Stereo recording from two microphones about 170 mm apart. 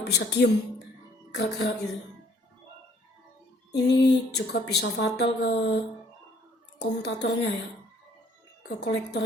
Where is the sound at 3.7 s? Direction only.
80° left.